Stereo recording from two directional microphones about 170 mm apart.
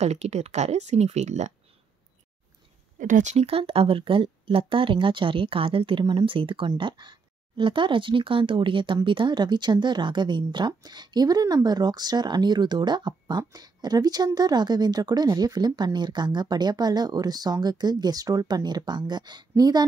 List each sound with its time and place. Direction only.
0.0 s speech: 40° right (ahead or behind)
3.0 s speech: 50° right (ahead or behind); by 19.8 s 25° right (ahead or behind)